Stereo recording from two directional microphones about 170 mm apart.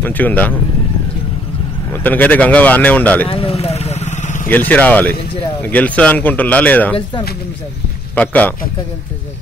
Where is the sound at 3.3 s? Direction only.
35° left (ahead or behind).